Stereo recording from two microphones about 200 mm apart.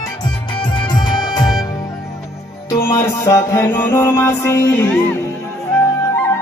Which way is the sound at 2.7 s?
10° left (ahead or behind).